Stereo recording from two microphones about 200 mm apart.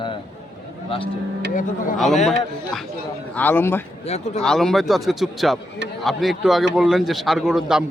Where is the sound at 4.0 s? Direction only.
30° left (ahead or behind).